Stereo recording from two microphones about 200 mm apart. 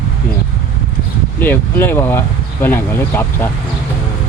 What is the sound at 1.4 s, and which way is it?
Speech, 10° left (ahead or behind).